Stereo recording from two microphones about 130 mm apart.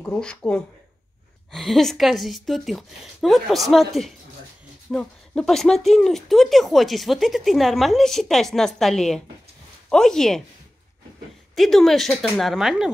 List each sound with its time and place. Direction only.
0.0 s speech: 10° left (ahead or behind)
4.9 s speech: 5° left (ahead or behind)
11.5 s speech: centre (ahead or behind)